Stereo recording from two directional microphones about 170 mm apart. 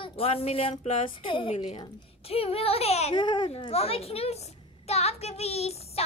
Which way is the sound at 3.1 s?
25° left (ahead or behind).